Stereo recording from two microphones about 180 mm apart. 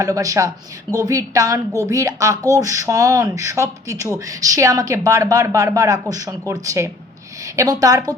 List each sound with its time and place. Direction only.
0.0 s speech: 20° right (ahead or behind)